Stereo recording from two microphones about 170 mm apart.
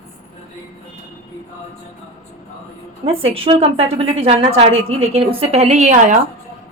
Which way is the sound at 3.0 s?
35° right (ahead or behind).